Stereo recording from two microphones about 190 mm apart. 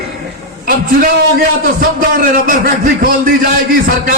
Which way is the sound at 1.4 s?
45° right (ahead or behind).